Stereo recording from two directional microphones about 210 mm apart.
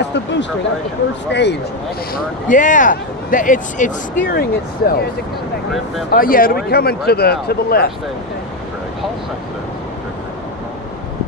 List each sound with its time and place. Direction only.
0.0 s speech: 55° left (ahead or behind)
2.4 s speech: 40° left (ahead or behind)
6.1 s speech: 45° left (ahead or behind)